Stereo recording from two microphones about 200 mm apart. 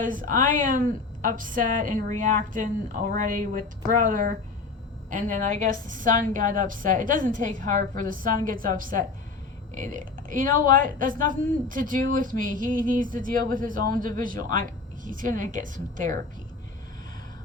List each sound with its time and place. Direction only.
0.0 s a woman's voice: 40° right (ahead or behind)